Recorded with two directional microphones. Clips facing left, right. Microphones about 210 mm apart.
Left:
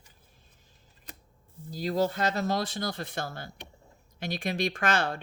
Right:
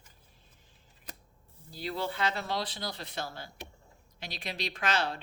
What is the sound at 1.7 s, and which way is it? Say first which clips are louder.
Speech: left 8 dB; 40° left (ahead or behind).